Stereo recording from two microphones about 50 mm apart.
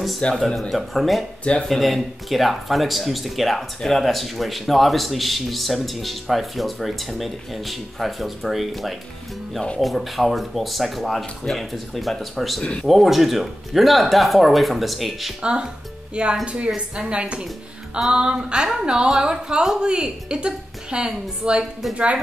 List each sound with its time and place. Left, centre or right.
0.2 s speech: left
0.6 s speech: centre
1.5 s speech: left
1.8 s speech: centre
15.4 s a woman's voice: centre